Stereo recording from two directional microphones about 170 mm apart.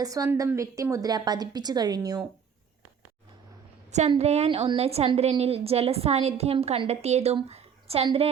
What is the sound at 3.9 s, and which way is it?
A woman's voice, 40° right (ahead or behind).